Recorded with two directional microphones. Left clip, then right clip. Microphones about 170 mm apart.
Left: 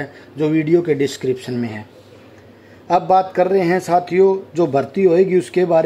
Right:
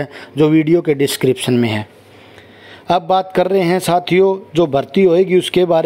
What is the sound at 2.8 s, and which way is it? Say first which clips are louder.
Speech: even; 30° right (ahead or behind).